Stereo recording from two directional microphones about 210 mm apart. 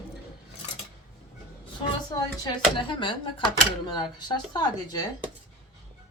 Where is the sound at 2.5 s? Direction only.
25° left (ahead or behind).